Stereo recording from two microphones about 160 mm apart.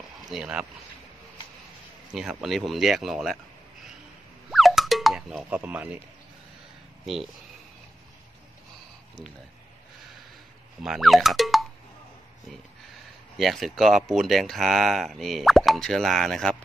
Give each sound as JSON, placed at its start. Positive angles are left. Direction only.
{"t": 0.2, "sound": "speech", "side_deg": -5}
{"t": 2.1, "sound": "speech", "side_deg": 0}
{"t": 4.5, "sound": "a sound", "side_deg": 0}
{"t": 7.1, "sound": "speech", "side_deg": 0}
{"t": 10.8, "sound": "speech", "side_deg": 0}
{"t": 13.4, "sound": "speech", "side_deg": 0}